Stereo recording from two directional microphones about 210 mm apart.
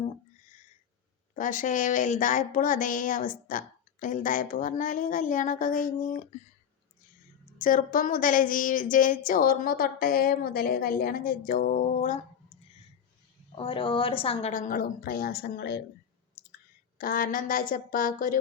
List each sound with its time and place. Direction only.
1.4 s a woman's voice: 40° left (ahead or behind)
7.6 s a woman's voice: 40° left (ahead or behind)
13.6 s a woman's voice: 25° left (ahead or behind); by 15.8 s 50° left (ahead or behind)
16.4 s clicking: 45° left (ahead or behind)
17.0 s a woman's voice: 45° left (ahead or behind)